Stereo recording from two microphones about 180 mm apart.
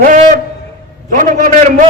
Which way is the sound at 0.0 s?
45° right (ahead or behind).